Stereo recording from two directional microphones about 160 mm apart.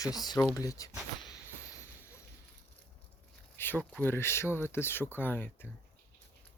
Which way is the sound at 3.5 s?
15° left (ahead or behind).